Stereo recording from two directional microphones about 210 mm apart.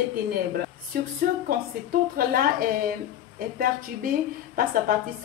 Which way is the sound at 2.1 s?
45° right (ahead or behind).